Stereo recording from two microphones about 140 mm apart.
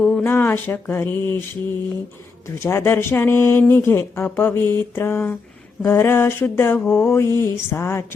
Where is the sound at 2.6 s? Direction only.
15° left (ahead or behind).